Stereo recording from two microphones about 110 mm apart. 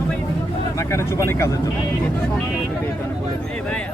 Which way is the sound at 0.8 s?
25° left (ahead or behind).